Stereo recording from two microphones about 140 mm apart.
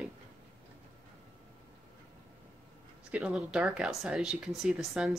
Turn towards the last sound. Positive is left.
turn(degrees=0)  # may be behind; listen again after turning